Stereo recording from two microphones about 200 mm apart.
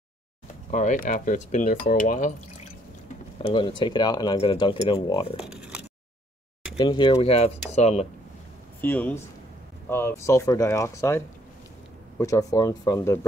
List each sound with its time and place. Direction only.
0.7 s speech: 40° left (ahead or behind)
3.4 s speech: 25° left (ahead or behind)
5.4 s a sound: 5° right (ahead or behind)
6.8 s speech: 20° left (ahead or behind)
8.8 s speech: 10° left (ahead or behind)